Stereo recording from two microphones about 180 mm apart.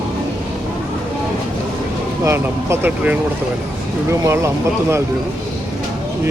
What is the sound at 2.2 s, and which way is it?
Speech, 15° right (ahead or behind).